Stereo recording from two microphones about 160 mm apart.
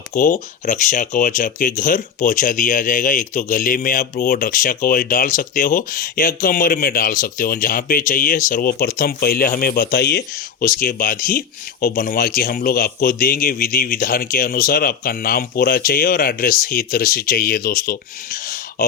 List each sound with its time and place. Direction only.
0.1 s speech: 50° left (ahead or behind)